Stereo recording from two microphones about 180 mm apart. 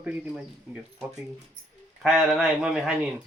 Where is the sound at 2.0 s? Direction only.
Centre (ahead or behind).